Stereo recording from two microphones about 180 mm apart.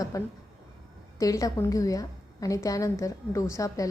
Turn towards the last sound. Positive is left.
turn(degrees=20)  # may be behind; listen again after turning